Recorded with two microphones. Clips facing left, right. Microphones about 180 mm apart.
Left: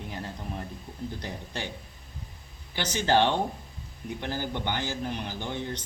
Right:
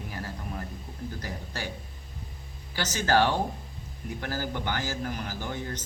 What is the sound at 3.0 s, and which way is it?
A man's voice, 20° left (ahead or behind).